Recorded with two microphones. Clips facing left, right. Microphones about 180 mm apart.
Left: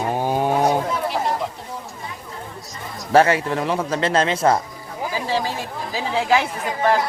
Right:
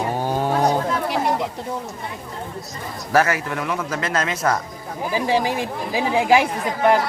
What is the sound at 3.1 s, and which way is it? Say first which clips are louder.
Speech: left 4 dB; 30° left (ahead or behind).